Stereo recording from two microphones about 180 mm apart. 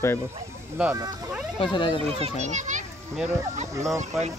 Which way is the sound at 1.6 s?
25° left (ahead or behind).